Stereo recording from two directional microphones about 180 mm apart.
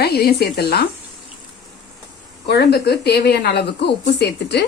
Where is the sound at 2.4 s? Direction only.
65° left (ahead or behind).